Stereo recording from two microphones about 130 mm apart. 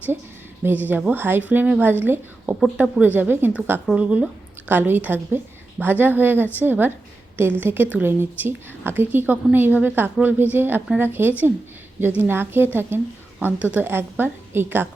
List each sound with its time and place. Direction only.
0.6 s a woman's voice: 15° right (ahead or behind)